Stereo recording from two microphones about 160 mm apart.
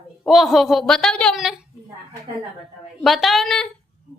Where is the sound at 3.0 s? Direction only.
Centre (ahead or behind).